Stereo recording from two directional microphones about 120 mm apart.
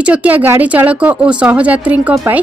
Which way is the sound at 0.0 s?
10° right (ahead or behind).